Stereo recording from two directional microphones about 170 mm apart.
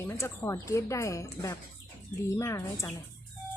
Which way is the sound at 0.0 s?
15° left (ahead or behind).